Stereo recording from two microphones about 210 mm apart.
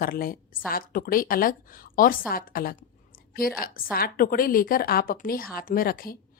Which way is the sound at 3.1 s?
45° left (ahead or behind).